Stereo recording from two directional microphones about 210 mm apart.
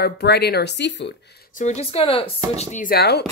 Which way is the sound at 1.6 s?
30° left (ahead or behind).